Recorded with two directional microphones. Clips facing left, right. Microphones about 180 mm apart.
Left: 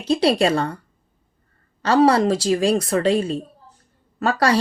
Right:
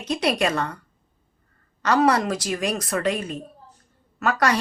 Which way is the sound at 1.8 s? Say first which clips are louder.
Left 4 dB; 30° left (ahead or behind).